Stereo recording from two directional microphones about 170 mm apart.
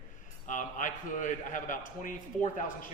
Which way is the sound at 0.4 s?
50° left (ahead or behind).